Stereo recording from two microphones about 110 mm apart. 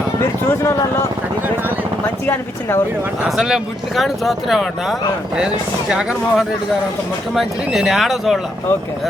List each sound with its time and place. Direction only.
0.4 s speech: 25° left (ahead or behind)
2.2 s speech: 20° left (ahead or behind)
3.2 s speech: 5° right (ahead or behind)